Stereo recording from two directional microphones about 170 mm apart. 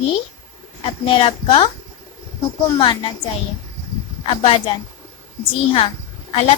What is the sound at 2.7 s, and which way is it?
Speech, 30° left (ahead or behind).